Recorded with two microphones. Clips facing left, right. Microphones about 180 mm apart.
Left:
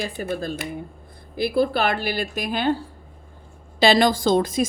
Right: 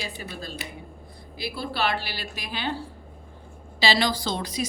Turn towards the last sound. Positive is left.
turn(degrees=50)  # may be behind; listen again after turning